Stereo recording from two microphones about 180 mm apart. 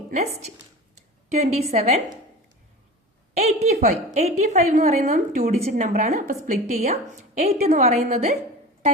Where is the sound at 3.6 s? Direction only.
40° right (ahead or behind).